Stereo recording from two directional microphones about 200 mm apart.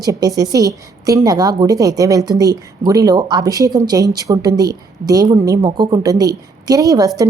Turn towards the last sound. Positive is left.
turn(degrees=-15)  # may be behind; listen again after turning